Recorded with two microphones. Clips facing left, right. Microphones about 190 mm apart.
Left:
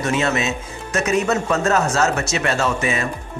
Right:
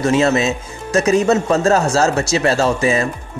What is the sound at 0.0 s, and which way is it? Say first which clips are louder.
Speech: right 6 dB; 30° right (ahead or behind).